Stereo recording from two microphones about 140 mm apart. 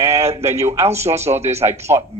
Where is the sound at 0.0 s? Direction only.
50° right (ahead or behind).